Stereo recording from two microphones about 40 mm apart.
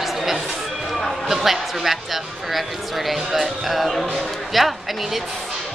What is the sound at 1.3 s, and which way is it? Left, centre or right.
Speech, centre.